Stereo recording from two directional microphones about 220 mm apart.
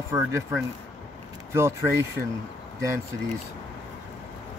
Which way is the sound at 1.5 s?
15° right (ahead or behind).